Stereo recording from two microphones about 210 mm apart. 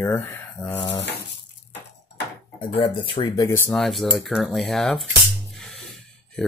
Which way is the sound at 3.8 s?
Centre (ahead or behind).